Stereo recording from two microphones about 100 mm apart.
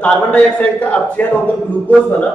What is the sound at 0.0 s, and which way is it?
A man's voice, 15° left (ahead or behind).